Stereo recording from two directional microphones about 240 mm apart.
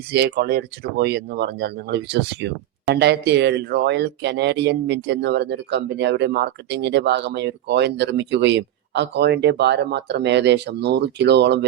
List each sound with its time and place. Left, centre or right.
0.1 s speech: right